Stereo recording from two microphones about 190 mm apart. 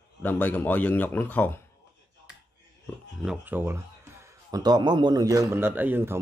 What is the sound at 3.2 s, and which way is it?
A man's voice, 5° right (ahead or behind).